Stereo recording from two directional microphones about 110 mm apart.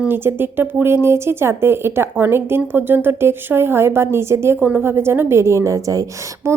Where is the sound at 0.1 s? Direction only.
20° right (ahead or behind).